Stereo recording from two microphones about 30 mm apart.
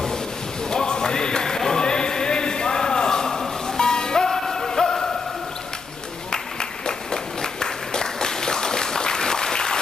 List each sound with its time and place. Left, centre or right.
0.7 s music: left
1.6 s a sound: centre
6.3 s applause: left